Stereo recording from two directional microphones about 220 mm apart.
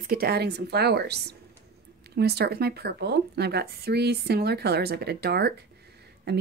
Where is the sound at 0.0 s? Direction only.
45° right (ahead or behind).